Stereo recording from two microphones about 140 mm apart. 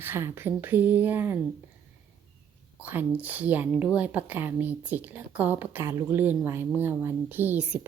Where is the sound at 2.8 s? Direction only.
10° right (ahead or behind).